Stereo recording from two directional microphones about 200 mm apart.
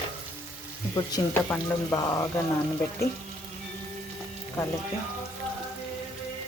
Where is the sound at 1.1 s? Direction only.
15° left (ahead or behind).